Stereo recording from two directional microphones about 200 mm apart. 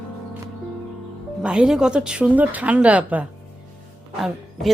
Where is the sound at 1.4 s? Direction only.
5° right (ahead or behind).